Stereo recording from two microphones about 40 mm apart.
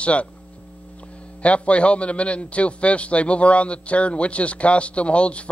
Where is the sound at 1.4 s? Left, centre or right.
Left.